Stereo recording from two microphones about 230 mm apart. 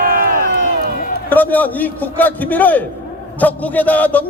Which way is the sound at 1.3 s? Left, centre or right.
Centre.